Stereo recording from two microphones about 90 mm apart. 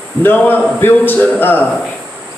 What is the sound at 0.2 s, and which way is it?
A man's voice, 20° left (ahead or behind).